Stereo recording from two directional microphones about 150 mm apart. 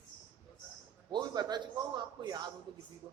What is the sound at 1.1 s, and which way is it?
A man's voice, 30° right (ahead or behind).